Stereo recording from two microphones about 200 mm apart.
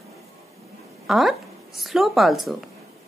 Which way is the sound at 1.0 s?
Centre (ahead or behind).